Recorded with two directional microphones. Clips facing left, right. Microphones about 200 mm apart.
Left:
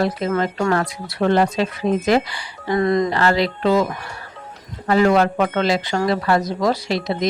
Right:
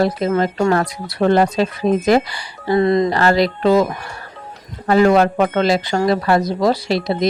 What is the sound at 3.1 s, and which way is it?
Speech, 40° right (ahead or behind).